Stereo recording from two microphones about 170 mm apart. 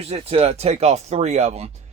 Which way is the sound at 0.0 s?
35° right (ahead or behind).